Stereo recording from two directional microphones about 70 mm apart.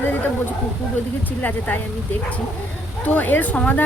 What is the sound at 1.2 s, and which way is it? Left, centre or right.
Speech, left.